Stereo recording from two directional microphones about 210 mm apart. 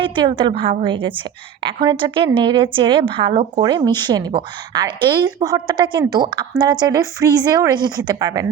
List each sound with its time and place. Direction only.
0.0 s a woman's voice: 25° right (ahead or behind)